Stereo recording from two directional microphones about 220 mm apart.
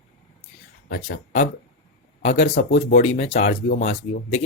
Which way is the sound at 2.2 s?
30° left (ahead or behind).